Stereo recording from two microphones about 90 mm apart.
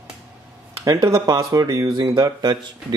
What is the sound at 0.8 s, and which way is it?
Speech, 40° right (ahead or behind).